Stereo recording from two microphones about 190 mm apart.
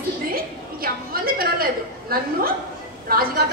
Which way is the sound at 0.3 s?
50° right (ahead or behind).